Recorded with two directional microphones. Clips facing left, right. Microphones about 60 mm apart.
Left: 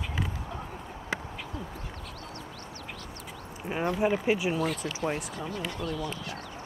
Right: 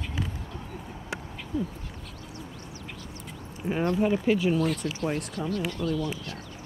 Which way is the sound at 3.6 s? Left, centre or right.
Centre.